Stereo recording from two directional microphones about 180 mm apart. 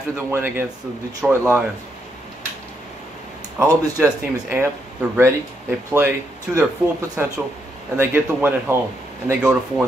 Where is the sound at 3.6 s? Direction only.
15° right (ahead or behind).